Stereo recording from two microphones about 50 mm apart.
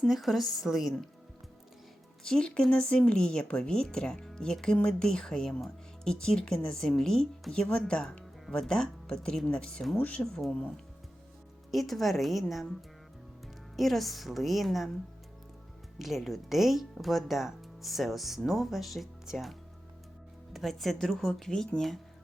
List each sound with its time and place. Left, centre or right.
0.0 s speech: centre
2.2 s speech: centre
11.7 s speech: centre
13.7 s speech: centre
16.0 s speech: centre